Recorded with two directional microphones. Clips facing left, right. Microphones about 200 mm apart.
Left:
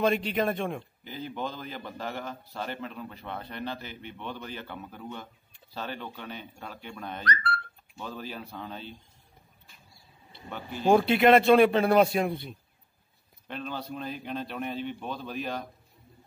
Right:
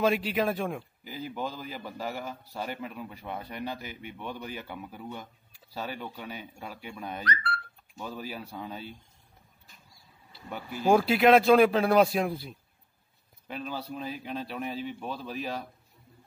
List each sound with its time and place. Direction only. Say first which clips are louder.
0.0 s a man's voice: even; 5° right (ahead or behind)
7.2 s speech: left 3 dB; 45° left (ahead or behind)
8.0 s a man's voice: even; 10° right (ahead or behind)
10.3 s speech: even; 5° right (ahead or behind)